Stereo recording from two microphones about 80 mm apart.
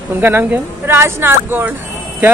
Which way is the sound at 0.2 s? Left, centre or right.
Right.